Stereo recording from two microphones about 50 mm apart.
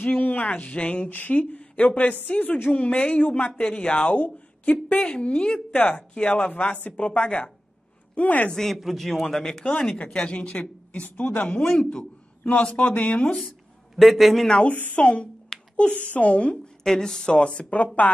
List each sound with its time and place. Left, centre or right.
0.0 s a woman's voice: left
4.1 s speech: left
5.7 s a woman's voice: left
7.0 s a woman's voice: left
8.5 s a man's voice: centre
9.7 s speech: centre
13.9 s a man's voice: centre
14.6 s a woman's voice: left
15.0 s a woman's voice: left
16.8 s speech: centre
17.4 s speech: left